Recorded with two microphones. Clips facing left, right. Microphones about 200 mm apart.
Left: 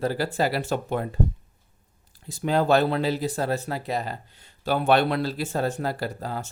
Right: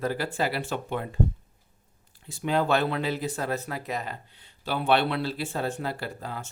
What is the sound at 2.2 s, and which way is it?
Speech, 40° left (ahead or behind).